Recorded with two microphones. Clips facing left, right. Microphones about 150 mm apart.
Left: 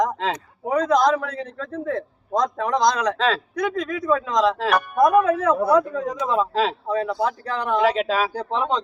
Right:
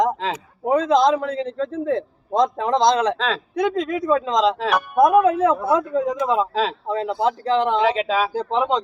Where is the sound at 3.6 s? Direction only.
25° right (ahead or behind).